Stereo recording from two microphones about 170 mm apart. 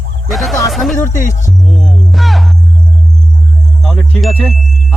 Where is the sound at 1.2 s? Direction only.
50° left (ahead or behind).